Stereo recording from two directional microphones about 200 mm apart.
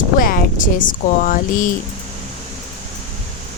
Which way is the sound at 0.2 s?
45° left (ahead or behind).